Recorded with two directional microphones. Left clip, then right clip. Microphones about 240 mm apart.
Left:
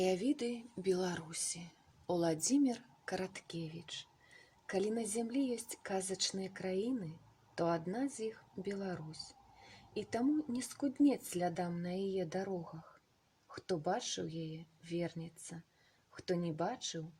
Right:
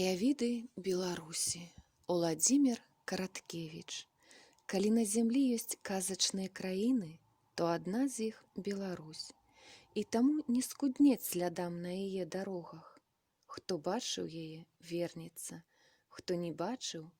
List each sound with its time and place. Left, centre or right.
0.0 s speech: right